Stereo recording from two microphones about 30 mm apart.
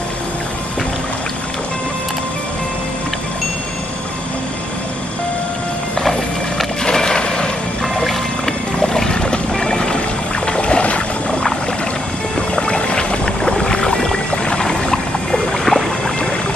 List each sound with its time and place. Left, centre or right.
6.8 s a sound: centre
7.8 s music: centre
8.7 s boat: centre
9.9 s boat: left
12.4 s boat: left
13.7 s boat: left
15.5 s boat: centre